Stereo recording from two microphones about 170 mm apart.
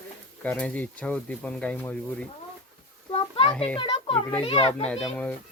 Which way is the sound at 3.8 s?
30° left (ahead or behind).